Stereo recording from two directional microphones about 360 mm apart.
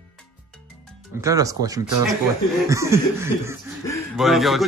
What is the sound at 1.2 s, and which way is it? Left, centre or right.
Snicker, centre.